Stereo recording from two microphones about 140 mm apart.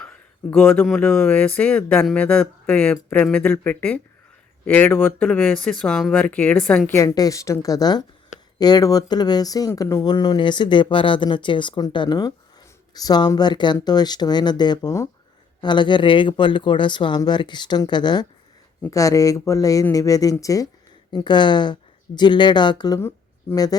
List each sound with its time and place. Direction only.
0.0 s a sound: 10° left (ahead or behind)
0.9 s speech: 5° left (ahead or behind)
7.0 s speech: 25° left (ahead or behind)
15.6 s speech: 35° left (ahead or behind)
23.0 s speech: 20° left (ahead or behind)